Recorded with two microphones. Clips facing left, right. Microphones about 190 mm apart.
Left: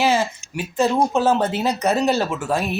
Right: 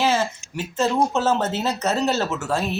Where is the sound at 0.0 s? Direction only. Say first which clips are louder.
Left 2 dB; 15° left (ahead or behind).